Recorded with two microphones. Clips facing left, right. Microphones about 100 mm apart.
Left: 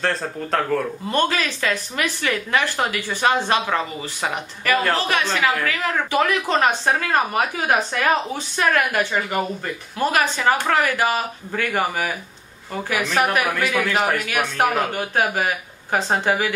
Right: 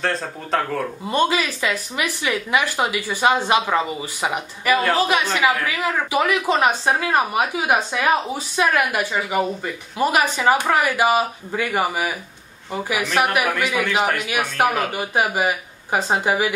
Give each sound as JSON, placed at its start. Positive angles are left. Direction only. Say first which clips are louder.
{"t": 0.0, "sound": "speech", "louder": "left 1 dB", "side_deg": 0}
{"t": 1.1, "sound": "a woman's voice", "louder": "right 2 dB", "side_deg": -15}
{"t": 14.2, "sound": "a woman's voice", "louder": "right 1 dB", "side_deg": -15}